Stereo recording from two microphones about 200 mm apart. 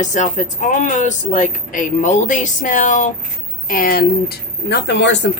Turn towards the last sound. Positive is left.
turn(degrees=60)  # may be behind; listen again after turning